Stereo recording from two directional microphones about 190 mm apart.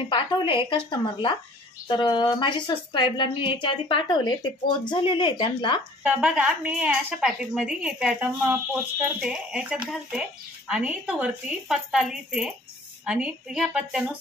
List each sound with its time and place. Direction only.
0.1 s a woman's voice: 25° left (ahead or behind)
6.0 s a woman's voice: 5° right (ahead or behind)